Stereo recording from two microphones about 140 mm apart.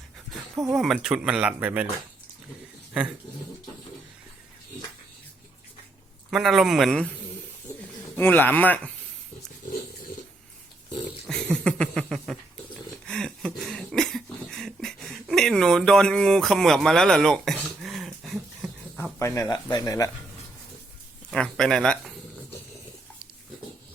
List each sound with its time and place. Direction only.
0.7 s speech: 5° right (ahead or behind)
6.3 s speech: 5° right (ahead or behind)
8.1 s speech: 15° left (ahead or behind)
11.0 s a sound: 5° left (ahead or behind)
19.2 s speech: 20° left (ahead or behind)
21.2 s speech: 5° left (ahead or behind)